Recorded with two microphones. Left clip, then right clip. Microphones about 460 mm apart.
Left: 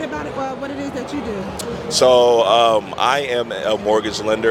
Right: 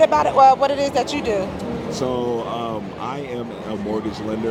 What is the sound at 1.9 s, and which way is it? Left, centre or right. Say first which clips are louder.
Speech: left 12 dB; left.